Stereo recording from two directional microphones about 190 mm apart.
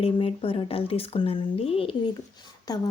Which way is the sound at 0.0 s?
30° left (ahead or behind).